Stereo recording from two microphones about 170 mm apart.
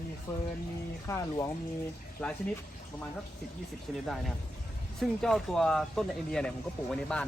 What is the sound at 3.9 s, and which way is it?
Speech, 5° right (ahead or behind).